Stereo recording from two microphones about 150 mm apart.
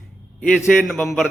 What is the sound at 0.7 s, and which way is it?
Speech, centre (ahead or behind).